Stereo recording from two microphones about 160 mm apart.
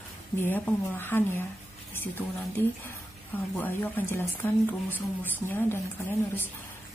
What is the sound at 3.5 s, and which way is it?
Speech, 15° left (ahead or behind).